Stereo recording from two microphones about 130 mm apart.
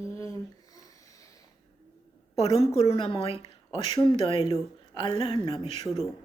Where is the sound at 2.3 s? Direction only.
50° left (ahead or behind).